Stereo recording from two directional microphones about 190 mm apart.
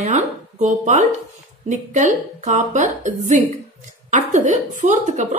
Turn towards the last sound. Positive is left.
turn(degrees=-40)  # may be behind; listen again after turning